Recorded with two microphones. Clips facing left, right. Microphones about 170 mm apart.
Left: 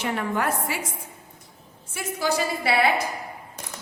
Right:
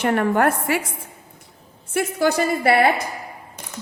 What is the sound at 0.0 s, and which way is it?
Speech, 55° right (ahead or behind).